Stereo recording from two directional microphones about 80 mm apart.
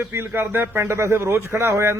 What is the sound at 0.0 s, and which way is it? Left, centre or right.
A man's voice, right.